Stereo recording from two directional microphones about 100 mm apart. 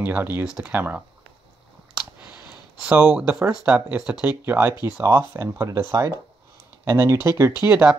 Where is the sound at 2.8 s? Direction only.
10° right (ahead or behind); by 5.8 s 30° right (ahead or behind).